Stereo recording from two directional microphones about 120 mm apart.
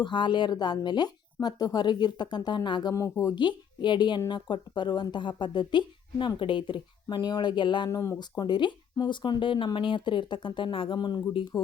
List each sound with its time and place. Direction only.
0.0 s speech: 40° left (ahead or behind)
2.9 s speech: 25° left (ahead or behind)
3.3 s speech: 40° left (ahead or behind)
7.9 s speech: 25° left (ahead or behind)
8.2 s speech: 35° left (ahead or behind)